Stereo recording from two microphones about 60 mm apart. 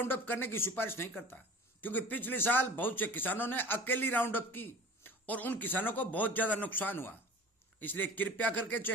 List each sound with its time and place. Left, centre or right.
0.0 s speech: left
1.8 s speech: left